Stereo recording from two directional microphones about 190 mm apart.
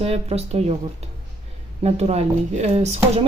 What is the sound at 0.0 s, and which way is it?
Speech, 30° right (ahead or behind).